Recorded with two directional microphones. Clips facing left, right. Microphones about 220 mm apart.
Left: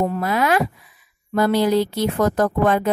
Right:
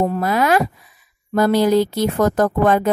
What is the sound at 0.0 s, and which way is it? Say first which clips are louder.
A woman's voice: right 2 dB; 40° right (ahead or behind).